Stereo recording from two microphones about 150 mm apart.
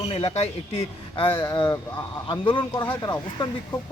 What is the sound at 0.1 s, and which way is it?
Speech, 40° left (ahead or behind).